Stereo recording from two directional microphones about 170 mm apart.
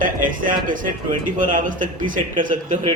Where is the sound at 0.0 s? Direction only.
55° right (ahead or behind).